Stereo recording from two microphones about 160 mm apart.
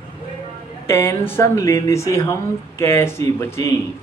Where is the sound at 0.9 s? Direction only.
15° left (ahead or behind).